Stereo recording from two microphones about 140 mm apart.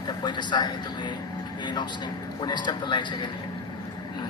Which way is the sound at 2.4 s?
30° left (ahead or behind).